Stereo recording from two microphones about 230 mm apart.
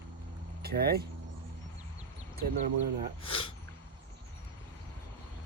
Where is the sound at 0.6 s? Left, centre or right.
Right.